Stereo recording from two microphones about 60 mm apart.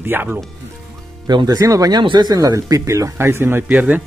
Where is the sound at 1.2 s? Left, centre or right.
Right.